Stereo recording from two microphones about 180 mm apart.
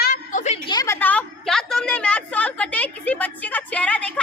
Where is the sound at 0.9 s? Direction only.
10° left (ahead or behind).